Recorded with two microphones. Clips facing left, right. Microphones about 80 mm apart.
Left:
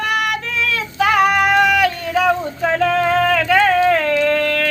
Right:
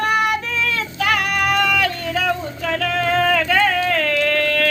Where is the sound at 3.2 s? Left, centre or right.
Centre.